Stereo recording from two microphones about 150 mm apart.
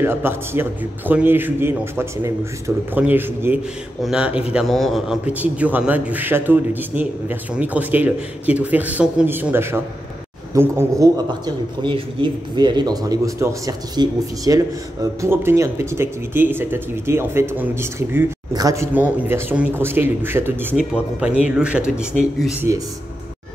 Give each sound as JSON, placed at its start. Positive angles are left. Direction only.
{"t": 0.0, "sound": "a man's voice", "side_deg": -15}
{"t": 11.8, "sound": "speech", "side_deg": -35}
{"t": 18.9, "sound": "a man's voice", "side_deg": -15}